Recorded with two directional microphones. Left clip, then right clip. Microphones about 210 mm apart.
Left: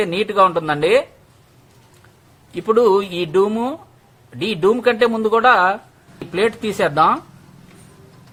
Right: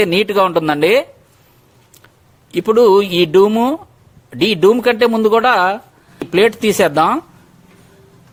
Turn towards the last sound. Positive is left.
turn(degrees=-45)  # may be behind; listen again after turning